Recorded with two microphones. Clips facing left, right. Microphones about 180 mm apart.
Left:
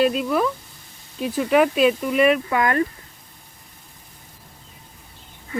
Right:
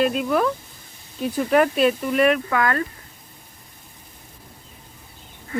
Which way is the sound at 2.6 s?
15° left (ahead or behind).